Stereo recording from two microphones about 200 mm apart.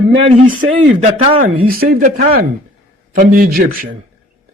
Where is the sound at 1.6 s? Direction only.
45° right (ahead or behind).